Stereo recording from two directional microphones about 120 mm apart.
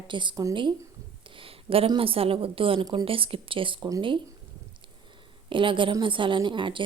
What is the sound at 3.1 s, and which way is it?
Speech, 50° right (ahead or behind).